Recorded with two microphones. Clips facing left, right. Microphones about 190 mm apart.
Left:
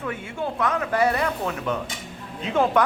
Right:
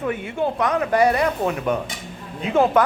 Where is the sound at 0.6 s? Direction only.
15° right (ahead or behind).